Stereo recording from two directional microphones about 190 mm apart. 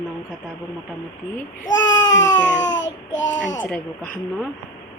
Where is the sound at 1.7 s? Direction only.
80° left.